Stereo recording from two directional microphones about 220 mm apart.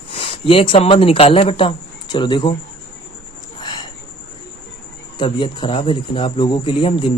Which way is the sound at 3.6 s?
20° left (ahead or behind).